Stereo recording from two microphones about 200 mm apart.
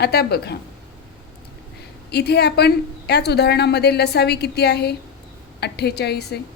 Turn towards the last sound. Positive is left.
turn(degrees=55)  # may be behind; listen again after turning